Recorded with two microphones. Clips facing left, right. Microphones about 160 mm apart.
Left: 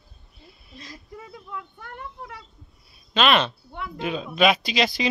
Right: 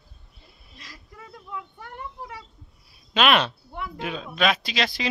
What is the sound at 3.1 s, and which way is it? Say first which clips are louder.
Speech: even; 5° right (ahead or behind).